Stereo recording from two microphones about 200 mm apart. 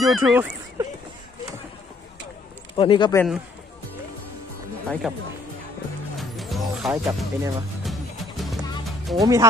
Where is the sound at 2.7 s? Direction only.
25° left (ahead or behind).